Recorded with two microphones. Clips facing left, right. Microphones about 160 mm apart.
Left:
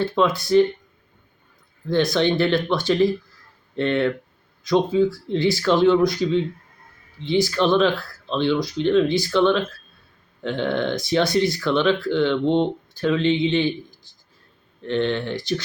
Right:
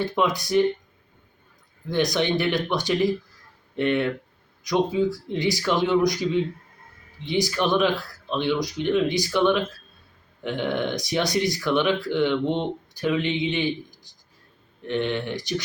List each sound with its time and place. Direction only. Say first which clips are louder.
0.0 s speech: left 3 dB; 15° right (ahead or behind)
1.9 s speech: left 3 dB; 15° right (ahead or behind)
14.8 s speech: left 3 dB; 15° right (ahead or behind)